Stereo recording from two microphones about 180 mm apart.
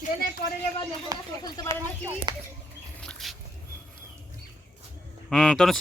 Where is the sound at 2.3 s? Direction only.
25° right (ahead or behind).